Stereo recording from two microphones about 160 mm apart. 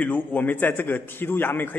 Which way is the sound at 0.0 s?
10° left (ahead or behind).